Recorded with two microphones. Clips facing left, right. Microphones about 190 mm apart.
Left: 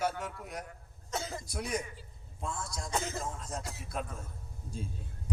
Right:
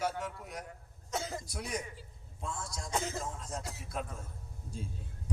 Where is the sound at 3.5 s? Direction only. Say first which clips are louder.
Left 1 dB; 55° left (ahead or behind).